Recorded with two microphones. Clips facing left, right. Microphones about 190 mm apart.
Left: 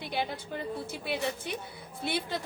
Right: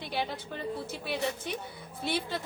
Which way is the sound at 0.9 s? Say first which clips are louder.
Left 1 dB; 55° left (ahead or behind).